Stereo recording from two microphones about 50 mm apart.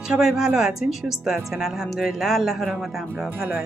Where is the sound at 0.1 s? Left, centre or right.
Centre.